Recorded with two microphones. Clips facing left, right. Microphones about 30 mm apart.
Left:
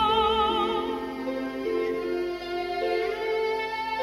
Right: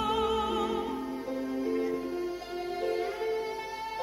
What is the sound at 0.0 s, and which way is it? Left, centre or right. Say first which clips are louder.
Music: left 6 dB; left.